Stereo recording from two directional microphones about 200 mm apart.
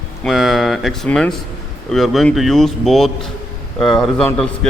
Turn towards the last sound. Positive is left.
turn(degrees=5)  # may be behind; listen again after turning